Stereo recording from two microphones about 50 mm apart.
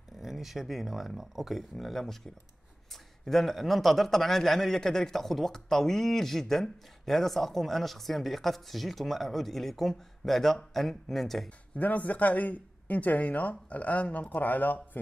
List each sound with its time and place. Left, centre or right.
0.2 s a man's voice: centre
11.8 s a man's voice: left